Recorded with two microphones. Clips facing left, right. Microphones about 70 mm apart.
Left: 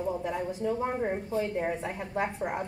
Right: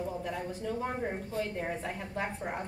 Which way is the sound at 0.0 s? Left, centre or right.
Left.